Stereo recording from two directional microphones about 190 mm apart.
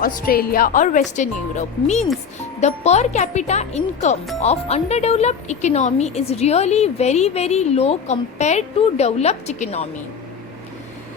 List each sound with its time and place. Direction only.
0.0 s speech: 50° left (ahead or behind)